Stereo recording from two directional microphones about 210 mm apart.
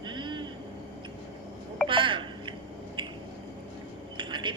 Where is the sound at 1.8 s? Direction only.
25° right (ahead or behind).